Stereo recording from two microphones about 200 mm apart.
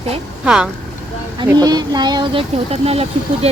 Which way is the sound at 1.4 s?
20° right (ahead or behind).